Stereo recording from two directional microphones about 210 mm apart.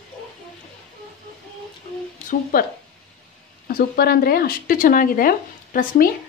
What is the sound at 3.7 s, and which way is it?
Speech, 45° left (ahead or behind).